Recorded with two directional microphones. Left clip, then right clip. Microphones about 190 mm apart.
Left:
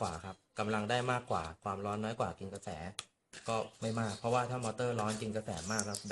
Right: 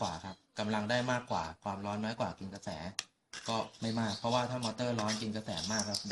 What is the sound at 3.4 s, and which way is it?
Speech, 25° left (ahead or behind).